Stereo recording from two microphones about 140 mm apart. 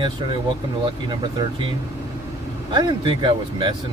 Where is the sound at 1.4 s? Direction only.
30° right (ahead or behind).